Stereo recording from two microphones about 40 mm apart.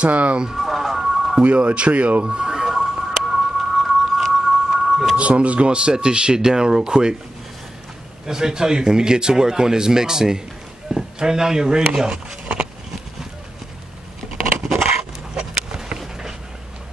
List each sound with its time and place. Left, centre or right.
0.0 s speech: right
0.5 s a sound: centre
1.4 s speech: right
2.2 s a sound: centre
5.1 s speech: right
8.3 s speech: centre
15.0 s dog: centre